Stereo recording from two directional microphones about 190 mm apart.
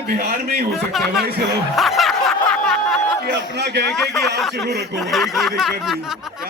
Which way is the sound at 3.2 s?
60° right (ahead or behind).